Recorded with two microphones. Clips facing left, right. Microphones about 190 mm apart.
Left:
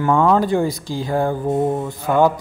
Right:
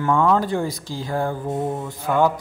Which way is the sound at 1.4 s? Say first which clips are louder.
Left 6 dB; 35° left (ahead or behind).